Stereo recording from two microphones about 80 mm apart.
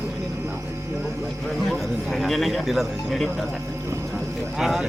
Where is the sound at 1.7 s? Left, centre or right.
Centre.